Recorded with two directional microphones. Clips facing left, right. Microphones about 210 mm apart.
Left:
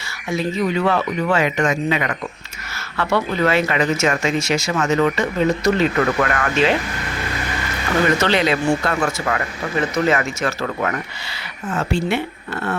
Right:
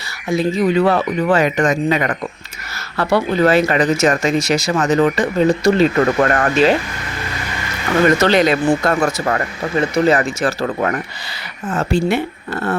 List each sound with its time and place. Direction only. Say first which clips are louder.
0.3 s speech: right 5 dB; 35° right (ahead or behind)
8.2 s speech: right 4 dB; 45° right (ahead or behind)